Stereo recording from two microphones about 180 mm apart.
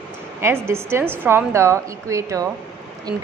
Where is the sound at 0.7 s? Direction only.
15° right (ahead or behind).